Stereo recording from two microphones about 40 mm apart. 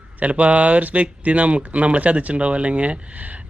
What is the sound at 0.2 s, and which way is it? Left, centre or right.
Speech, right.